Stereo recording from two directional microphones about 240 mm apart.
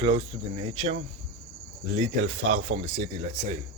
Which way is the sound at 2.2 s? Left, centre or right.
Right.